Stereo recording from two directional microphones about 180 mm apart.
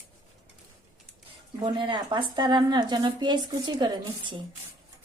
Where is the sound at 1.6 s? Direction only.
25° right (ahead or behind).